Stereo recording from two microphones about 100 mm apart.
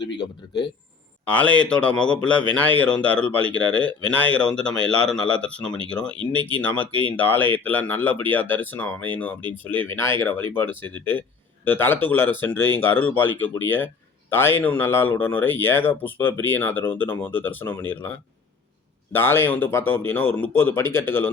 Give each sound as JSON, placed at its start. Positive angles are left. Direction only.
{"t": 1.2, "sound": "a man's voice", "side_deg": 10}